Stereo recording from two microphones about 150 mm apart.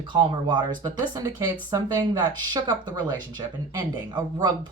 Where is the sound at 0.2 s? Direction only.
30° right (ahead or behind).